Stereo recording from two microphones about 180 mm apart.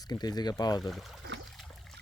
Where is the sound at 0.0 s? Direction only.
20° left (ahead or behind).